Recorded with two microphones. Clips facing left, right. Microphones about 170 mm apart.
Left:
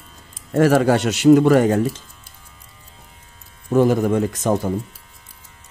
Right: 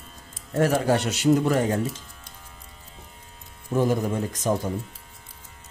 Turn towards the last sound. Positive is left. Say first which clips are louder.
# left 5 dB
turn(degrees=85)